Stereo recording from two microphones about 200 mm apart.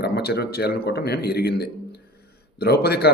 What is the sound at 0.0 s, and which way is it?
A man's voice, 55° left (ahead or behind).